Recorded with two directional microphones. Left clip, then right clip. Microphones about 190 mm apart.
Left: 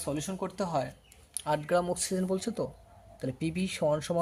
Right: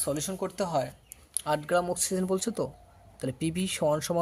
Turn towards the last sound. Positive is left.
turn(degrees=-20)  # may be behind; listen again after turning